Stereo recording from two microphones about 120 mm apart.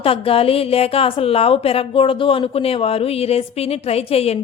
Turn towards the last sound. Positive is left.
turn(degrees=55)  # may be behind; listen again after turning